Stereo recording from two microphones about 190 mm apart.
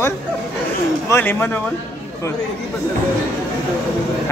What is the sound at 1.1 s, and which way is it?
Speech, 10° left (ahead or behind).